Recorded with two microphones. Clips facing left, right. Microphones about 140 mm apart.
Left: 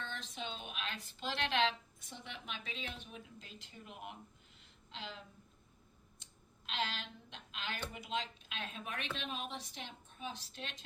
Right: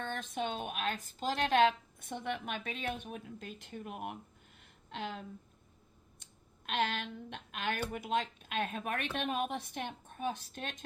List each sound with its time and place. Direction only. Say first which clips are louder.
0.0 s speech: right 8 dB; 50° right (ahead or behind)
6.7 s a woman's voice: right 7 dB; 55° right (ahead or behind)